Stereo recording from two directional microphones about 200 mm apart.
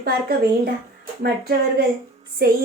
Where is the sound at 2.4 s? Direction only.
50° right (ahead or behind).